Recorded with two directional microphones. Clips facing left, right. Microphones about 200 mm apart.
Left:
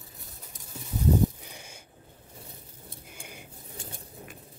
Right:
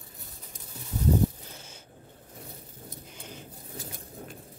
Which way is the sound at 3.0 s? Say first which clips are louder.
Right 2 dB; 10° left (ahead or behind).